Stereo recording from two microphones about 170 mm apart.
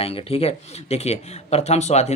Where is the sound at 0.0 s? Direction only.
35° left (ahead or behind).